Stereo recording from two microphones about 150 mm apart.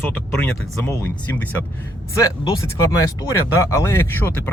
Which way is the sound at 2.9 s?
20° left (ahead or behind).